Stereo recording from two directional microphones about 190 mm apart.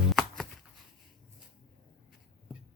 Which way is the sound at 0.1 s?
Centre (ahead or behind).